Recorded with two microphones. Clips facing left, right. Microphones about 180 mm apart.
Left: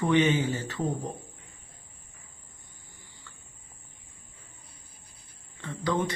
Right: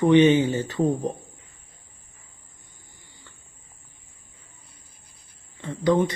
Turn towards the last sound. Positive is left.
turn(degrees=-15)  # may be behind; listen again after turning